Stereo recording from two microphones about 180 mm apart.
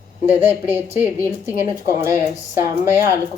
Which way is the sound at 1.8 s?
15° right (ahead or behind).